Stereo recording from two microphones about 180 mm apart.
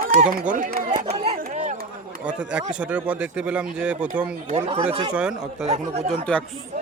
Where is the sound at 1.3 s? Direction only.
50° right (ahead or behind).